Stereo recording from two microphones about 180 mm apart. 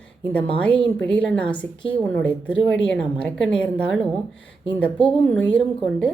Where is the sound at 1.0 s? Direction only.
5° left (ahead or behind).